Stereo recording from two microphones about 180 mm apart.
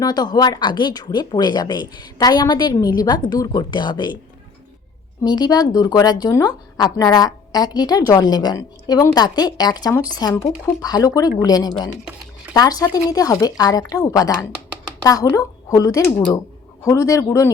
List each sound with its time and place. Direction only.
0.0 s a woman's voice: 25° left (ahead or behind)
5.2 s a woman's voice: 20° left (ahead or behind)